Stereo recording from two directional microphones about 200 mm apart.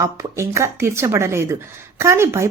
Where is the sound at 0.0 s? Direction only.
15° right (ahead or behind).